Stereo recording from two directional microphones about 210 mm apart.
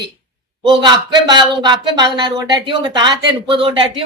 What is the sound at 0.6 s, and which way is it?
Speech, 20° right (ahead or behind).